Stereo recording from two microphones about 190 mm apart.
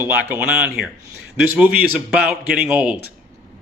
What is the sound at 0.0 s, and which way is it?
Speech, 10° right (ahead or behind).